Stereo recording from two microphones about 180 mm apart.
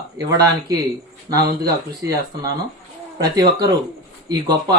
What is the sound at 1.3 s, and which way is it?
Speech, 20° right (ahead or behind).